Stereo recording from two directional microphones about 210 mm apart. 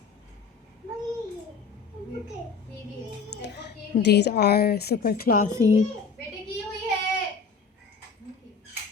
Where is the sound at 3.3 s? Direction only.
55° left (ahead or behind).